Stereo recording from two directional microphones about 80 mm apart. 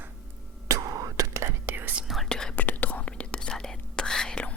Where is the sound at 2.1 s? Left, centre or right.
Centre.